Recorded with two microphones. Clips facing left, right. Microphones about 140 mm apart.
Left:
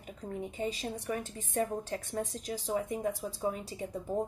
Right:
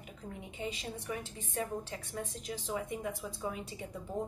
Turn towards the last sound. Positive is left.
turn(degrees=35)  # may be behind; listen again after turning